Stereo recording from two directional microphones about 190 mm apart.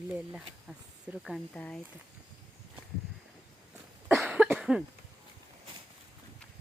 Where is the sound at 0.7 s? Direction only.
Centre (ahead or behind).